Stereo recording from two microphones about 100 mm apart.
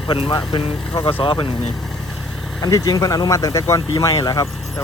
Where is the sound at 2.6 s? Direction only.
40° left (ahead or behind).